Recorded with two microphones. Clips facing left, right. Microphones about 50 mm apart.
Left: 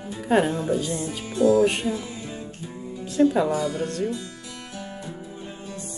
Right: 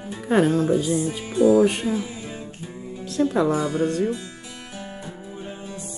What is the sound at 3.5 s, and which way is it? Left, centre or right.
Speech, right.